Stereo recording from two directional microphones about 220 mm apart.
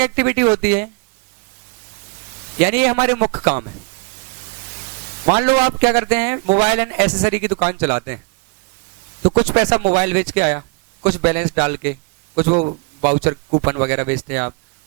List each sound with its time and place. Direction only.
0.0 s a man's voice: 15° right (ahead or behind)
2.6 s speech: 15° right (ahead or behind)
5.2 s a man's voice: 20° right (ahead or behind)
6.4 s speech: 30° right (ahead or behind)
6.7 s a man's voice: 15° right (ahead or behind)
9.5 s a man's voice: 15° right (ahead or behind)
10.3 s a sound: 20° right (ahead or behind)
11.2 s a man's voice: 15° right (ahead or behind); by 13.1 s 30° right (ahead or behind)
13.1 s speech: 20° right (ahead or behind)